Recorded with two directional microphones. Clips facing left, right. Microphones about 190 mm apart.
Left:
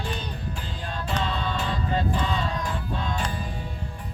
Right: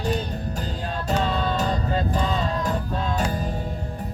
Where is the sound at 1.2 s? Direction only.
40° right (ahead or behind).